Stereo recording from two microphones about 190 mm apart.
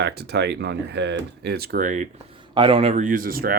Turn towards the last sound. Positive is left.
turn(degrees=-50)  # may be behind; listen again after turning